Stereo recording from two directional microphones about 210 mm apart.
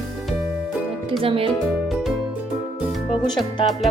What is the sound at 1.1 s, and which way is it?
Speech, 25° right (ahead or behind).